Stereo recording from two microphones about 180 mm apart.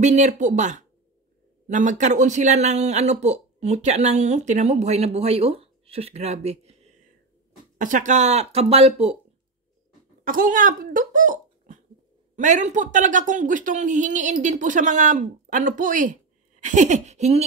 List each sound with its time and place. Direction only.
0.0 s speech: 40° right (ahead or behind)
10.2 s speech: 50° right (ahead or behind)